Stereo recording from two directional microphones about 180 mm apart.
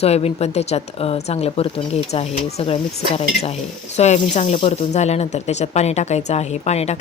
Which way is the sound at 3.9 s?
40° left (ahead or behind).